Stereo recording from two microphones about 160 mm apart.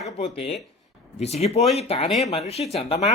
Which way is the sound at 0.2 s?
40° left (ahead or behind).